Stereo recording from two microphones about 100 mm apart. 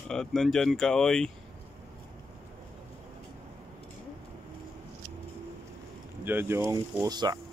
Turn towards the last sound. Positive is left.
turn(degrees=-40)  # may be behind; listen again after turning